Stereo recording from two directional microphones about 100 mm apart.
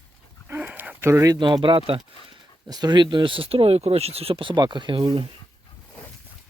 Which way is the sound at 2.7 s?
45° right (ahead or behind).